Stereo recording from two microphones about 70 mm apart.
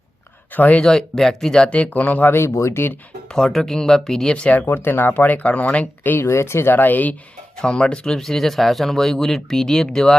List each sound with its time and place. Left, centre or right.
0.5 s speech: left
0.9 s speech: centre; by 2.3 s left
2.3 s speech: left
3.3 s speech: centre
4.7 s speech: left
7.6 s speech: centre